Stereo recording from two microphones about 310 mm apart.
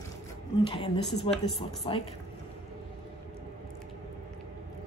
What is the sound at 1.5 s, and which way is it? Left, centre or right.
Speech, centre.